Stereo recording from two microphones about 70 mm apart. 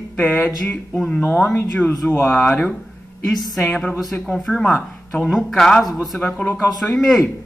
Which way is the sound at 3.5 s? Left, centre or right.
Centre.